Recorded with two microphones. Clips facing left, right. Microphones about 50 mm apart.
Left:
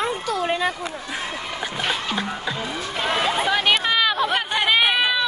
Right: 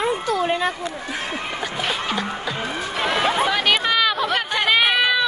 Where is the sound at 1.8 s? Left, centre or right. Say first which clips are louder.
Even; centre.